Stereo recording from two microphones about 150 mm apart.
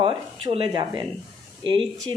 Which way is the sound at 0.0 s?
35° right (ahead or behind).